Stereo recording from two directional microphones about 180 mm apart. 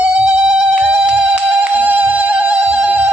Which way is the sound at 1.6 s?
10° right (ahead or behind).